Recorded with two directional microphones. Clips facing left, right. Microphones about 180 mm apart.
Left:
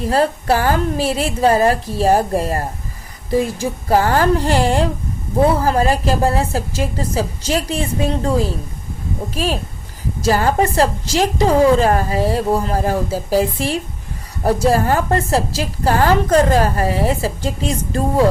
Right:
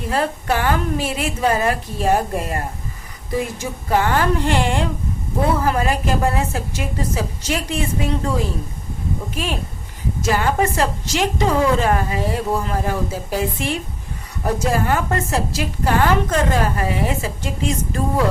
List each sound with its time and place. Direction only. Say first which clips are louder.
0.1 s a woman's voice: left 4 dB; 35° left (ahead or behind)